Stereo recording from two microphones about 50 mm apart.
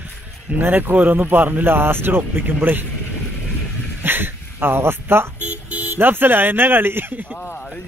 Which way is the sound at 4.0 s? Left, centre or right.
Right.